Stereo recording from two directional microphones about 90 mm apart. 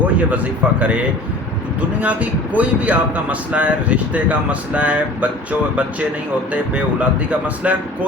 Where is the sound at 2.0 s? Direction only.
15° right (ahead or behind).